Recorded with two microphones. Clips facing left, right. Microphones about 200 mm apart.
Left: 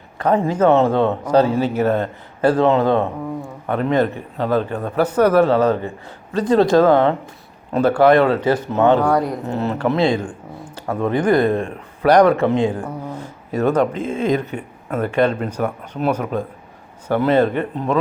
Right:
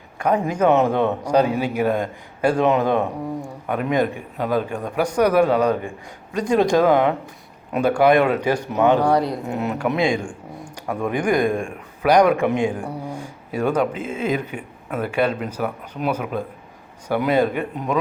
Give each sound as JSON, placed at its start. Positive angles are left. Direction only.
{"t": 0.2, "sound": "a man's voice", "side_deg": -10}
{"t": 9.1, "sound": "speech", "side_deg": -35}
{"t": 9.5, "sound": "a man's voice", "side_deg": -10}